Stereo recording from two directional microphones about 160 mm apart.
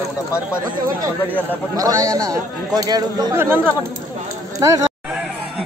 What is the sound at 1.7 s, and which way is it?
A man's voice, 20° right (ahead or behind).